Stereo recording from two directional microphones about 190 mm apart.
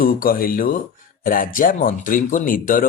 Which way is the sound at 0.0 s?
50° left (ahead or behind).